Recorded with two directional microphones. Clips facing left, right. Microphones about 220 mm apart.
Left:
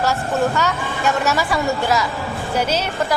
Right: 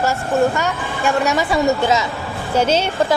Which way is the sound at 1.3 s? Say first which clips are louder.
Right 3 dB; 20° right (ahead or behind).